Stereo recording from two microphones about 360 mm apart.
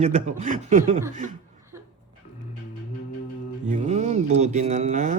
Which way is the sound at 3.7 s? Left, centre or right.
Centre.